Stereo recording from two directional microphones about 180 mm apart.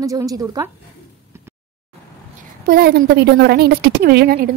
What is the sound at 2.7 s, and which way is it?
A woman's voice, 60° right (ahead or behind).